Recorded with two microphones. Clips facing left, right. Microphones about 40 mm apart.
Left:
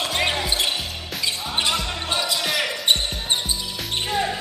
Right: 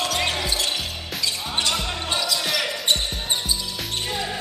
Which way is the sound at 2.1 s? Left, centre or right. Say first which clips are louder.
Left 1 dB; centre.